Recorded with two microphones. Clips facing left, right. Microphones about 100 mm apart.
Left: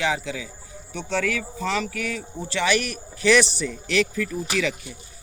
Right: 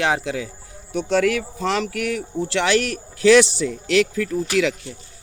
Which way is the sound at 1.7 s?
70° right (ahead or behind).